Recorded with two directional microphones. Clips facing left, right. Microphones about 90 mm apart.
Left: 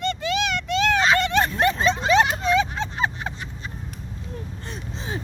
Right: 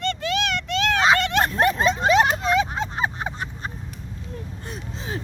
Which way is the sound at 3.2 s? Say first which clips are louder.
Right 2 dB; 35° right (ahead or behind).